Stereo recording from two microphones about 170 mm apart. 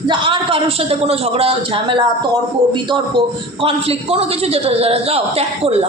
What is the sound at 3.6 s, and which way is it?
A woman's voice, 35° right (ahead or behind).